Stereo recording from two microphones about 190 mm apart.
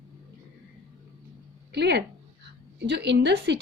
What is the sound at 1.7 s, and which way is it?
Speech, 60° right (ahead or behind).